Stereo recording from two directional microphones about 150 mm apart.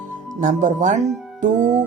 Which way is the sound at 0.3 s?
55° right (ahead or behind).